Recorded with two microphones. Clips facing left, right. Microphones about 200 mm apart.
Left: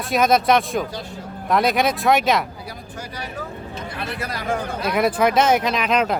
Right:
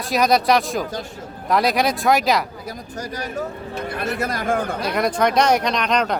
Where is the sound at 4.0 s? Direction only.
45° right (ahead or behind).